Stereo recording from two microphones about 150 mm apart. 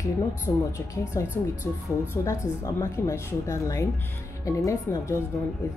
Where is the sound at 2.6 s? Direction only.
20° left (ahead or behind).